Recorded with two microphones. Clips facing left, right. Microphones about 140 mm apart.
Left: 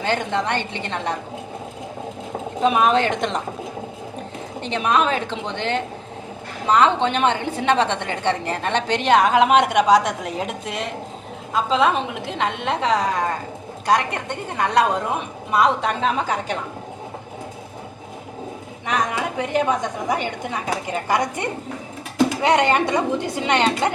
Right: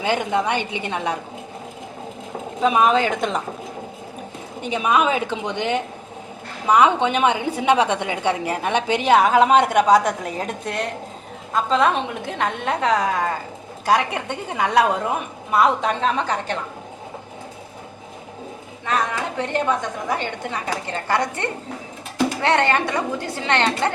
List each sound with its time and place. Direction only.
0.0 s a woman's voice: 10° right (ahead or behind)
2.6 s a woman's voice: centre (ahead or behind)
4.6 s a woman's voice: 10° right (ahead or behind); by 16.6 s 5° left (ahead or behind)
18.9 s a woman's voice: 15° left (ahead or behind)